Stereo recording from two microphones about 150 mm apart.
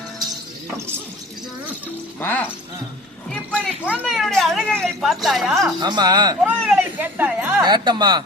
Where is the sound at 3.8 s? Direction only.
5° right (ahead or behind).